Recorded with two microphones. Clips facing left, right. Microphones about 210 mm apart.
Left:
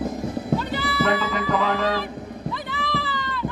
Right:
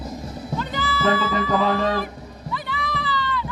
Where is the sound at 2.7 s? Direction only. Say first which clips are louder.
Right 2 dB; 50° left (ahead or behind).